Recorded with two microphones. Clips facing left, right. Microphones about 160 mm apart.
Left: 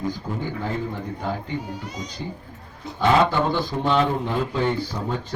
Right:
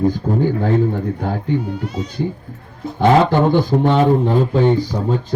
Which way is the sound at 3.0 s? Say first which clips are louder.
Right 6 dB; 50° right (ahead or behind).